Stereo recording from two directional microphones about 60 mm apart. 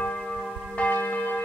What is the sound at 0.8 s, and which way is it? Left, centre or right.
Church bell, left.